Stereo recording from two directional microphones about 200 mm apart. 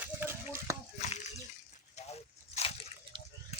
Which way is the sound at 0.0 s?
10° right (ahead or behind).